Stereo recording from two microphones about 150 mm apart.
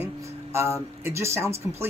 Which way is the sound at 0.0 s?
15° right (ahead or behind).